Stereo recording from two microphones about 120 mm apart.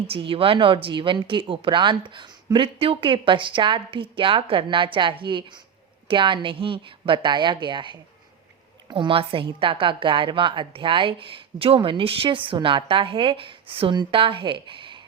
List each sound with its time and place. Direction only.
0.1 s a woman's voice: 50° right (ahead or behind)